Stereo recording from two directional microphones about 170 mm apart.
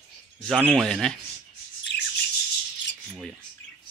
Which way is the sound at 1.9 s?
80° left.